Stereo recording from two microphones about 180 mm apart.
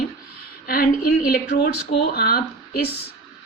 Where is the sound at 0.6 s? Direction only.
55° left (ahead or behind).